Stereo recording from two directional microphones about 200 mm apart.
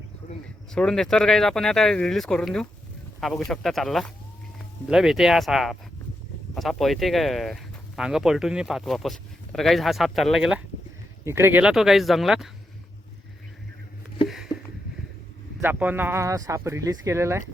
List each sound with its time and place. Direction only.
0.2 s a sound: 40° left (ahead or behind)
0.7 s speech: 5° left (ahead or behind)
15.6 s speech: 10° right (ahead or behind)